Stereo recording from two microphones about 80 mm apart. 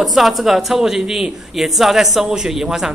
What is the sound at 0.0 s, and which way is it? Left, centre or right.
Speech, centre.